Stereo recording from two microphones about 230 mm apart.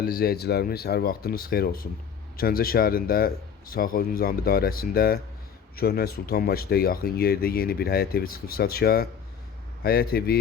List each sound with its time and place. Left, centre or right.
0.0 s speech: left